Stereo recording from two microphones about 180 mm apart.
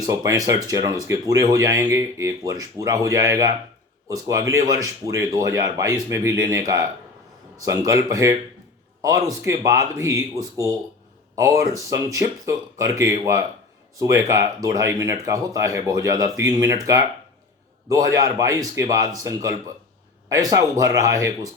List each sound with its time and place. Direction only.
0.0 s a man's voice: 20° right (ahead or behind)
9.0 s speech: 20° right (ahead or behind)